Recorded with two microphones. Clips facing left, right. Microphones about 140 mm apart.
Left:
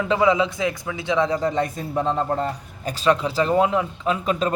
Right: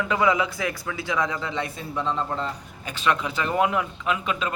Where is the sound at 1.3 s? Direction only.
40° left (ahead or behind).